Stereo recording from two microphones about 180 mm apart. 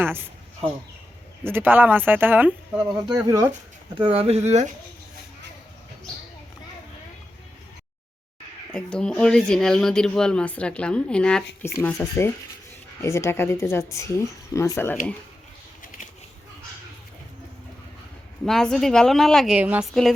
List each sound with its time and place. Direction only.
0.0 s speech: 10° right (ahead or behind)
1.5 s speech: 10° right (ahead or behind); by 4.7 s 40° right (ahead or behind)
8.7 s speech: 5° left (ahead or behind)
18.4 s speech: 5° left (ahead or behind)